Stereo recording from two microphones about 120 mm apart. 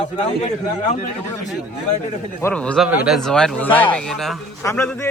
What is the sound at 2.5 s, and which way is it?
A man's voice, 10° left (ahead or behind).